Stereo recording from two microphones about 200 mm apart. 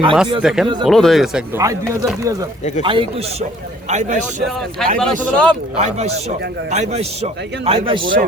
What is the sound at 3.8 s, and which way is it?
Speech, 35° right (ahead or behind).